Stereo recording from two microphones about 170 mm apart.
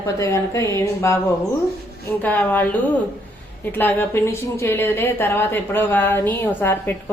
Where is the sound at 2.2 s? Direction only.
10° left (ahead or behind).